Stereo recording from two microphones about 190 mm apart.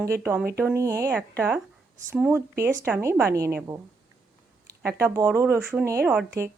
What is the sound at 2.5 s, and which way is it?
Speech, 55° right (ahead or behind).